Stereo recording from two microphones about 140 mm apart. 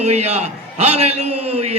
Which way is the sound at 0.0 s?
50° right (ahead or behind).